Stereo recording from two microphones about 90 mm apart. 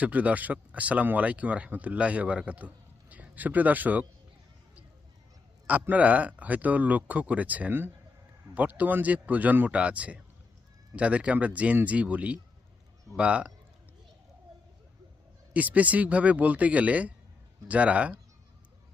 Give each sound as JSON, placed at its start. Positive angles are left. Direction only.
{"t": 0.0, "sound": "speech", "side_deg": -15}
{"t": 5.6, "sound": "speech", "side_deg": -15}
{"t": 15.5, "sound": "speech", "side_deg": -15}